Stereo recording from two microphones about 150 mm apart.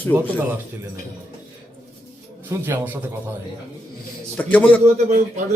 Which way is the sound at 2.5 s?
15° right (ahead or behind).